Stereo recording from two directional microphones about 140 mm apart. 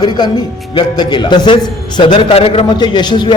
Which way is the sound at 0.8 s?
30° left (ahead or behind).